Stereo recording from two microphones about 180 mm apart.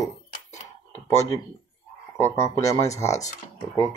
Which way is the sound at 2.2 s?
15° left (ahead or behind).